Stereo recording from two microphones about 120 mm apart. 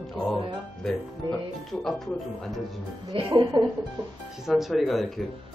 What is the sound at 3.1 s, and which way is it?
Speech, 50° right (ahead or behind).